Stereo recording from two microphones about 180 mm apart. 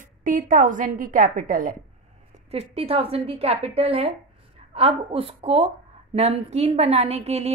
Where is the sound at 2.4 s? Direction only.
35° right (ahead or behind).